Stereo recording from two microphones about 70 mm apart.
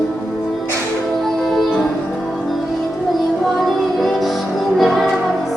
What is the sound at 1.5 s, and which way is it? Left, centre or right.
Music, centre.